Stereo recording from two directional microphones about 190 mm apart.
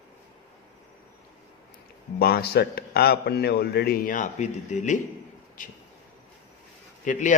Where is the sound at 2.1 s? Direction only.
55° left (ahead or behind); by 4.9 s 40° left (ahead or behind).